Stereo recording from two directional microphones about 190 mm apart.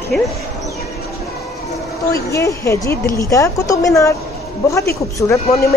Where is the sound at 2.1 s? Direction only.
15° left (ahead or behind).